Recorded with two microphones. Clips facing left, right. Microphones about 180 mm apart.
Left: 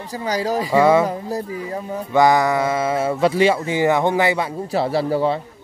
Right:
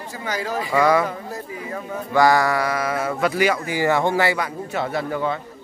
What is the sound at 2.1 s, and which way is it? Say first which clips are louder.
Speech: left 2 dB; 20° left (ahead or behind).